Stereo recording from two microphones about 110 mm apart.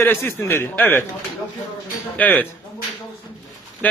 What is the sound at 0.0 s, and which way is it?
A man's voice, 20° left (ahead or behind).